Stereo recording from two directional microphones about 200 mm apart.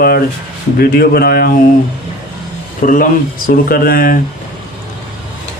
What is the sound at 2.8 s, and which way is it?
A man's voice, 45° left (ahead or behind).